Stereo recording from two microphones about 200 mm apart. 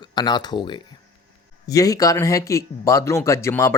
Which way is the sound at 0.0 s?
20° left (ahead or behind).